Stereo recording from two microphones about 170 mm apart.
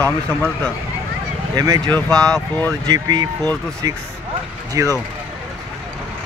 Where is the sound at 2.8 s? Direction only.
20° right (ahead or behind).